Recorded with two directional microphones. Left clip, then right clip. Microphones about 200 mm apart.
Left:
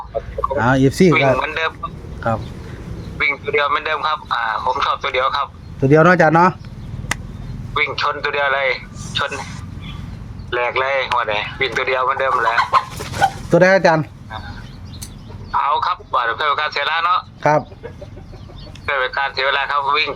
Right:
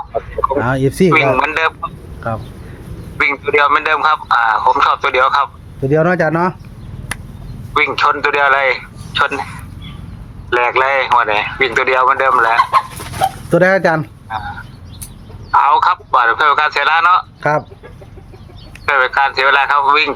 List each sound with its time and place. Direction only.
0.1 s a sound: 35° right (ahead or behind)
0.5 s speech: 5° left (ahead or behind)
1.4 s chicken: 35° right (ahead or behind)
2.2 s speech: 10° left (ahead or behind)
3.2 s a man's voice: 35° right (ahead or behind)
5.8 s speech: 20° left (ahead or behind)
7.7 s a man's voice: 35° right (ahead or behind)
10.5 s a man's voice: 35° right (ahead or behind)
13.5 s speech: 5° right (ahead or behind)
14.3 s frog: 35° right (ahead or behind)
15.5 s radio: 40° right (ahead or behind)
18.9 s a man's voice: 35° right (ahead or behind)